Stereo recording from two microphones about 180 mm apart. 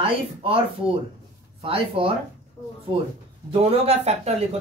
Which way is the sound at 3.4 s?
35° right (ahead or behind).